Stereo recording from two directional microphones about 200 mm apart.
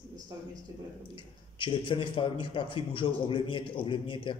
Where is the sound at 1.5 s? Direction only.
25° left (ahead or behind).